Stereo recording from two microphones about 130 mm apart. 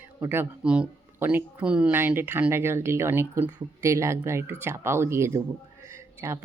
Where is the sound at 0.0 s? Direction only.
15° right (ahead or behind).